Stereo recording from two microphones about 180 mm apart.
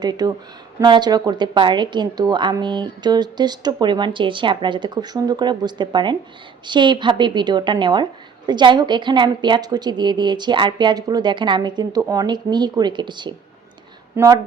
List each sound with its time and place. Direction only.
0.0 s a woman's voice: 20° right (ahead or behind)
14.2 s a woman's voice: 15° right (ahead or behind)